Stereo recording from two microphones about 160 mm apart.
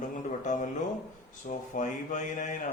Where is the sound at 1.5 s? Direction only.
65° left (ahead or behind).